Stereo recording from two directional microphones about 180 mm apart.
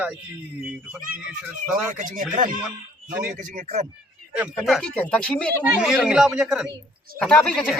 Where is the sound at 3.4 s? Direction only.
45° right (ahead or behind).